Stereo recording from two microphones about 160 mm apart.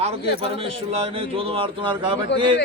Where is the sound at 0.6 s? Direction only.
40° right (ahead or behind).